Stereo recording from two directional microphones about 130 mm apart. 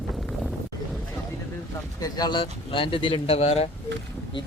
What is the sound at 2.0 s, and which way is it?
A man's voice, 30° left (ahead or behind).